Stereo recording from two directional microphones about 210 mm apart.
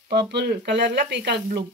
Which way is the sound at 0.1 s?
55° right (ahead or behind).